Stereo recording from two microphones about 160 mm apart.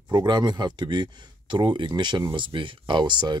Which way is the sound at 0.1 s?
25° right (ahead or behind).